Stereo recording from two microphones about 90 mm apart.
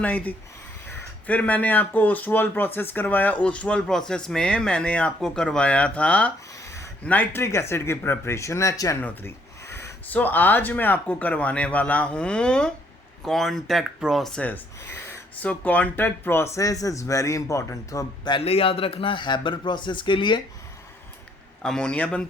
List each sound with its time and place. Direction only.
0.0 s speech: 15° left (ahead or behind)
6.6 s a sound: 35° left (ahead or behind)
7.0 s speech: 20° left (ahead or behind)
7.4 s speech: 30° left (ahead or behind)
9.0 s a sound: 25° left (ahead or behind)
10.1 s speech: 20° left (ahead or behind); by 14.3 s centre (ahead or behind)
14.3 s speech: 20° left (ahead or behind); by 18.0 s 35° left (ahead or behind)
18.3 s speech: 85° left; by 20.4 s 60° left (ahead or behind)
21.6 s speech: 10° left (ahead or behind)